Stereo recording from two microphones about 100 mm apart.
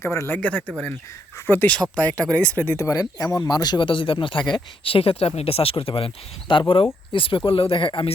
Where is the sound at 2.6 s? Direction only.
30° left (ahead or behind).